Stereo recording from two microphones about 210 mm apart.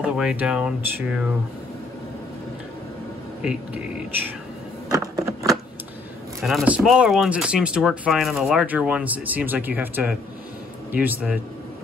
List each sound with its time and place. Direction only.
0.0 s speech: 5° right (ahead or behind)
4.9 s a sound: 15° right (ahead or behind)
6.4 s a man's voice: 5° right (ahead or behind)